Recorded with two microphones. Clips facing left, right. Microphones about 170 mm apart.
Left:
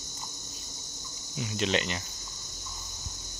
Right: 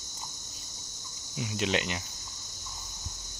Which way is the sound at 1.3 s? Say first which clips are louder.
Left 1 dB; 10° right (ahead or behind).